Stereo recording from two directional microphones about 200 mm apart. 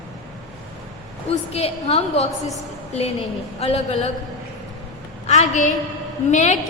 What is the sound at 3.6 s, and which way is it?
Speech, 30° left (ahead or behind).